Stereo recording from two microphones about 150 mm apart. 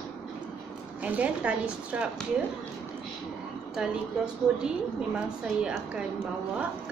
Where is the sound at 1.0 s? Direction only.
10° right (ahead or behind).